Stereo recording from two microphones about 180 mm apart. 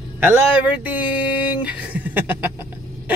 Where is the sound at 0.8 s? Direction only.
10° right (ahead or behind).